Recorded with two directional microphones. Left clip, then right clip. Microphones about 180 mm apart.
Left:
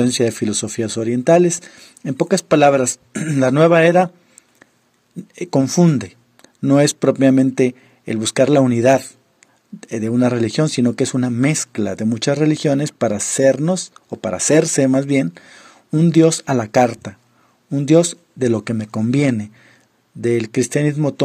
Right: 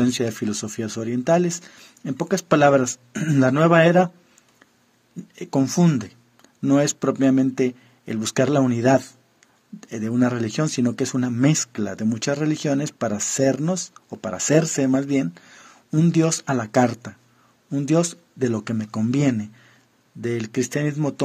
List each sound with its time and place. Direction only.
0.0 s speech: 30° left (ahead or behind)
5.3 s speech: 30° left (ahead or behind)